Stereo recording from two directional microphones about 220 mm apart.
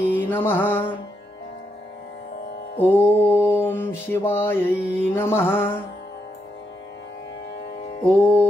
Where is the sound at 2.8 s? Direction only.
10° left (ahead or behind).